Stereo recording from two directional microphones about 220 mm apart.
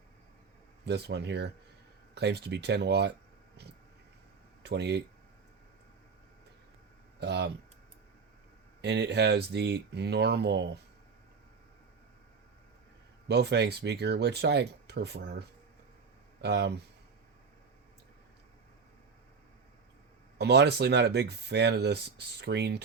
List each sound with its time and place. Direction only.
0.9 s speech: 50° right (ahead or behind)
4.6 s speech: 50° right (ahead or behind)
7.2 s speech: 50° right (ahead or behind)
8.8 s speech: 50° right (ahead or behind)
13.2 s speech: 50° right (ahead or behind)
20.4 s speech: 50° right (ahead or behind)